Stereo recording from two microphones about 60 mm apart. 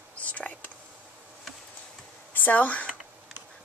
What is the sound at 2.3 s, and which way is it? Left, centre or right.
Speech, left.